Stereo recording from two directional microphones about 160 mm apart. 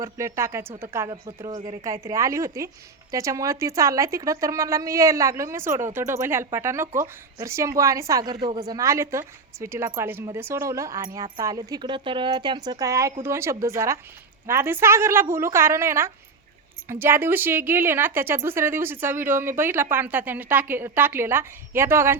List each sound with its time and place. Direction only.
0.0 s a woman's voice: 20° right (ahead or behind)